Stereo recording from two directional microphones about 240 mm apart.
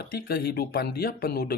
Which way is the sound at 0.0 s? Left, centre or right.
Left.